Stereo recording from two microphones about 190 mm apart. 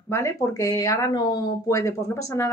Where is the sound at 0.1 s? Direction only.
15° left (ahead or behind).